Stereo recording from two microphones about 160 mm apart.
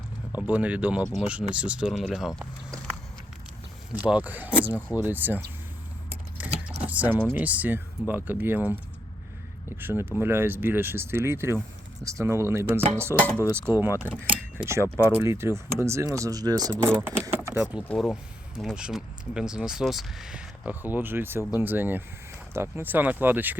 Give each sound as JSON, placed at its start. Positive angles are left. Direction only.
{"t": 0.3, "sound": "speech", "side_deg": -10}
{"t": 3.9, "sound": "speech", "side_deg": -10}
{"t": 6.1, "sound": "keys jangling", "side_deg": -10}
{"t": 6.8, "sound": "speech", "side_deg": -10}
{"t": 10.0, "sound": "speech", "side_deg": -15}
{"t": 13.1, "sound": "speech", "side_deg": 10}
{"t": 13.5, "sound": "speech", "side_deg": -15}
{"t": 16.8, "sound": "speech", "side_deg": -15}